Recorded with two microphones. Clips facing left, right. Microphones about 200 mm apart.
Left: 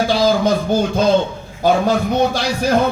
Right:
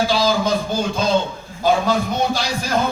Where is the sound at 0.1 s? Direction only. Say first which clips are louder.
Left 3 dB; 55° left (ahead or behind).